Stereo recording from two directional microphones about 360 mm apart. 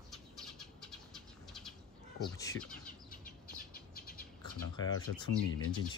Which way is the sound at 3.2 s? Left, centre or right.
Left.